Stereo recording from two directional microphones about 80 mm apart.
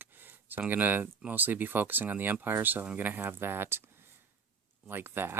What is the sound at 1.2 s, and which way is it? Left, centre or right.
Speech, right.